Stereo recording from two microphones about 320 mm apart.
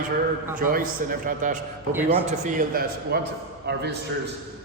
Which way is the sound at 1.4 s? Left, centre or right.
Right.